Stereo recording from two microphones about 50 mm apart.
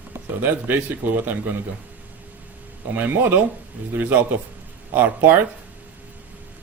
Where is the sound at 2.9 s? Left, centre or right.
Right.